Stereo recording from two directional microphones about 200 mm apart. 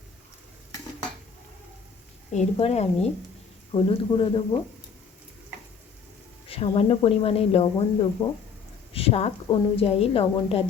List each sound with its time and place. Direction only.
2.3 s a woman's voice: 35° left (ahead or behind)
6.5 s a woman's voice: 30° left (ahead or behind)